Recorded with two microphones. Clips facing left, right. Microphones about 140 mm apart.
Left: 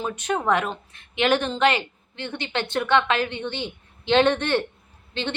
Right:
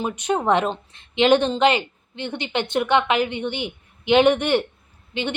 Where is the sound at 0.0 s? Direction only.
20° right (ahead or behind).